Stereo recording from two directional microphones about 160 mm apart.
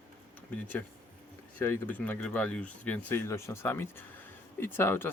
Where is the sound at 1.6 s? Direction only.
10° left (ahead or behind).